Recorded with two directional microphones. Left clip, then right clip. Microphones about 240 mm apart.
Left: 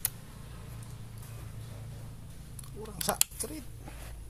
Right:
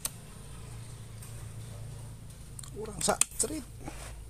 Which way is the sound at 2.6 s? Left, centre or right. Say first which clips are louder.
Right 3 dB; right.